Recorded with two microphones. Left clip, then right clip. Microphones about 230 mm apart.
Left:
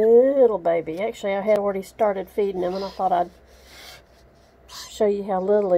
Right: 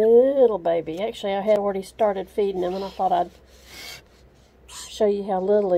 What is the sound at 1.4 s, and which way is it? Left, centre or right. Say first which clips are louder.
Speech: even; centre.